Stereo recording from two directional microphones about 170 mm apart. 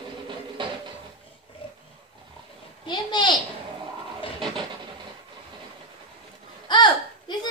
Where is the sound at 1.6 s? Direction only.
30° left (ahead or behind).